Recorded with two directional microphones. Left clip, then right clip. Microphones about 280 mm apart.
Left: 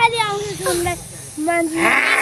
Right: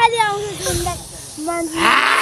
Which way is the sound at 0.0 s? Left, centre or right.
Right.